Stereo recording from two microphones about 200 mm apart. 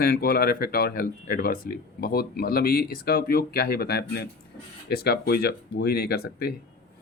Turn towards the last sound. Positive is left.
turn(degrees=50)  # may be behind; listen again after turning